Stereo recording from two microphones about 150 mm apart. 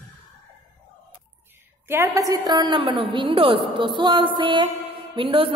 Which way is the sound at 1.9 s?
20° right (ahead or behind).